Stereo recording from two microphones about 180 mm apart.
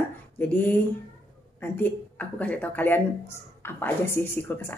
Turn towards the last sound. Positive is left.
turn(degrees=10)  # may be behind; listen again after turning